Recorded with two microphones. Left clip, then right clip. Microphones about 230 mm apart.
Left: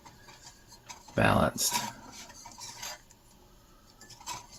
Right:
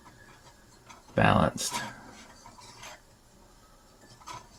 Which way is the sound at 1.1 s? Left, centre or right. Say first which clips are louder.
Right 2 dB; right.